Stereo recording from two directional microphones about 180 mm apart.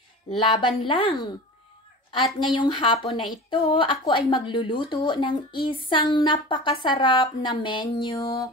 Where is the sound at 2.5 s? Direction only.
30° left (ahead or behind).